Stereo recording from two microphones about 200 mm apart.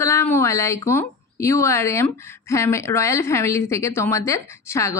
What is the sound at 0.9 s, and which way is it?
Speech, 15° left (ahead or behind).